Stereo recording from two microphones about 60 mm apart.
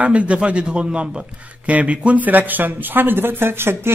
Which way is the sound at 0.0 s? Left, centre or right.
Centre.